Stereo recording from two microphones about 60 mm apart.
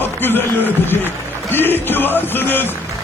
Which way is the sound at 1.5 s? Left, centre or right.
Left.